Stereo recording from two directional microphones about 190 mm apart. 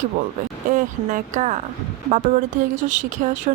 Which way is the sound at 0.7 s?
40° right (ahead or behind).